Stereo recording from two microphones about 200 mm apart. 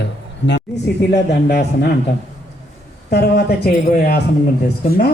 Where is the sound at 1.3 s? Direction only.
55° left (ahead or behind).